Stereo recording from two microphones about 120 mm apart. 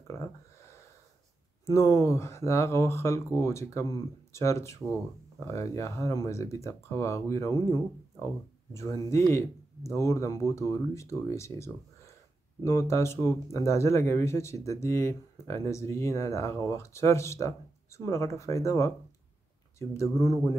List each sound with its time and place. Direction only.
1.7 s speech: 25° left (ahead or behind)
20.0 s speech: 25° left (ahead or behind)